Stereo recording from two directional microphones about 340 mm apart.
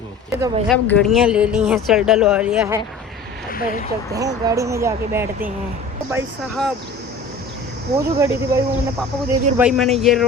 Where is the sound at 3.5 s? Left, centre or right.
Left.